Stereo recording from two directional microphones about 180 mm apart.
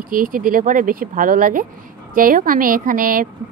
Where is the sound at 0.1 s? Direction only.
50° right (ahead or behind).